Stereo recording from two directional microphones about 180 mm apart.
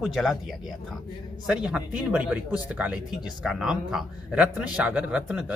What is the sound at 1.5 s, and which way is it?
Speech, 5° right (ahead or behind).